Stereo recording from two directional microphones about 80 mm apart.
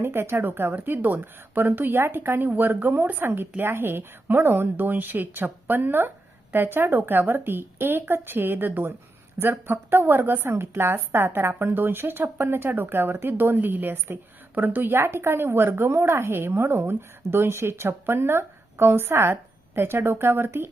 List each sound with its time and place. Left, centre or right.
0.0 s a woman's voice: right